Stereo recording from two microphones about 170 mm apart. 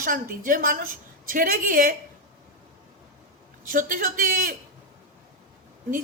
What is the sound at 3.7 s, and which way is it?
Speech, 50° right (ahead or behind).